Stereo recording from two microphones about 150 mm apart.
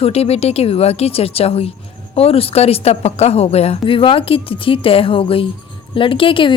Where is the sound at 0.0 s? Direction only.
45° left (ahead or behind).